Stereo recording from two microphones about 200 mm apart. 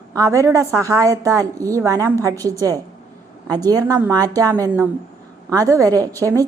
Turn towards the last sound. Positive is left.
turn(degrees=-15)  # may be behind; listen again after turning